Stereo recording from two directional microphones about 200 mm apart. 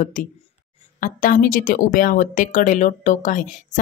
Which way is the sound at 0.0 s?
40° left (ahead or behind).